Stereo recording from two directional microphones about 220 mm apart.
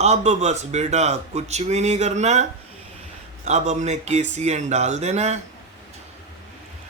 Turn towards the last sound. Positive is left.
turn(degrees=-30)  # may be behind; listen again after turning